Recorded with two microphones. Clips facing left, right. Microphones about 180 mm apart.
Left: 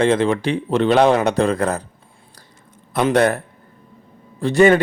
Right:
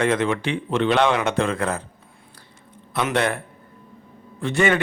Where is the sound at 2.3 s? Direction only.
40° left (ahead or behind).